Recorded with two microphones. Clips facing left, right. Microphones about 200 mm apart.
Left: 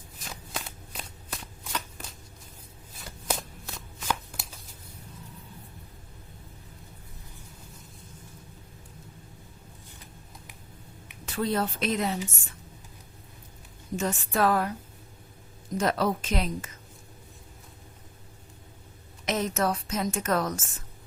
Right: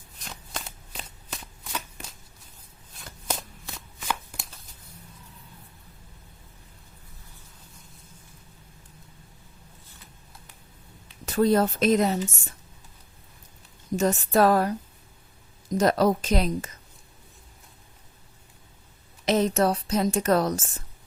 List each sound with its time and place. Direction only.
0.2 s shuffling cards: 5° left (ahead or behind)
11.3 s speech: 45° right (ahead or behind)
13.9 s a woman's voice: 40° right (ahead or behind)
15.7 s a woman's voice: 40° right (ahead or behind)
19.2 s a woman's voice: 30° right (ahead or behind)